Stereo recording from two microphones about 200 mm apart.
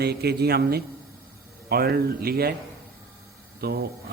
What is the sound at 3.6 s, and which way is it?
Speech, 50° right (ahead or behind).